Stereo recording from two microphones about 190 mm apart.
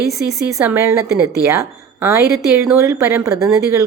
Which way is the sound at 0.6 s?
10° right (ahead or behind).